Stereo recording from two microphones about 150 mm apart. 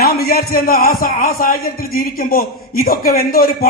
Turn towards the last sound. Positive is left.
turn(degrees=75)  # may be behind; listen again after turning